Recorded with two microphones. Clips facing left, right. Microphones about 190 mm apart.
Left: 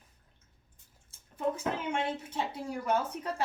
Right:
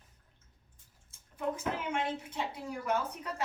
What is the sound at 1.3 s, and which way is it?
Speech, 30° left (ahead or behind).